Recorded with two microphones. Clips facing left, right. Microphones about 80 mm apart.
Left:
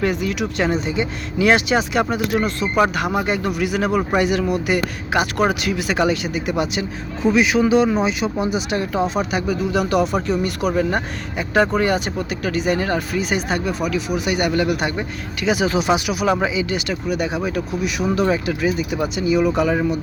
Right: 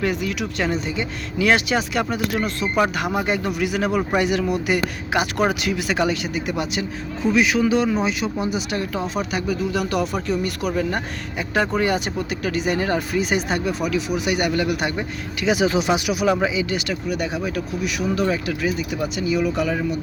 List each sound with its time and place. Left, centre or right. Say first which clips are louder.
0.0 s speech: left 2 dB; centre
0.3 s speech: left 3 dB; centre
10.0 s speech: left 3 dB; left
10.8 s speech: left 3 dB; centre
11.8 s speech: left 2 dB; centre
12.5 s speech: left 2 dB; centre
16.2 s speech: left 1 dB; centre